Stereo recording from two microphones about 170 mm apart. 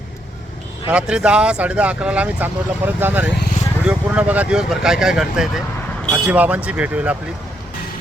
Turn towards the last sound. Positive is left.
turn(degrees=-10)  # may be behind; listen again after turning